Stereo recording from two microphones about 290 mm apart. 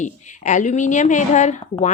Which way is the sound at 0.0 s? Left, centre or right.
Left.